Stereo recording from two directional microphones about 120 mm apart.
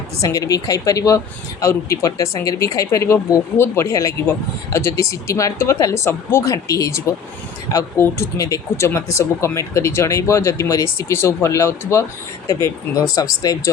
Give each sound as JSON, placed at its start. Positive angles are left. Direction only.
{"t": 0.2, "sound": "speech", "side_deg": 30}